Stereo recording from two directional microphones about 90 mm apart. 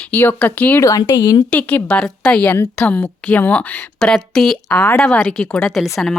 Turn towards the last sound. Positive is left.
turn(degrees=5)  # may be behind; listen again after turning